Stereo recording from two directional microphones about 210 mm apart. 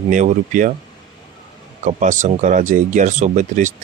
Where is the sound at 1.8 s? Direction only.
35° right (ahead or behind).